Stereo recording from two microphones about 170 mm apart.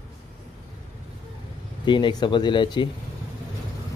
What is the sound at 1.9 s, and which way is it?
Speech, 25° left (ahead or behind).